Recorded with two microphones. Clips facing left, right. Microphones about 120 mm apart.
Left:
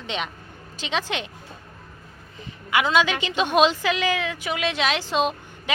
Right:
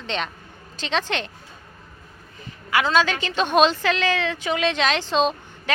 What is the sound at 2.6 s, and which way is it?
A woman's voice, 15° left (ahead or behind).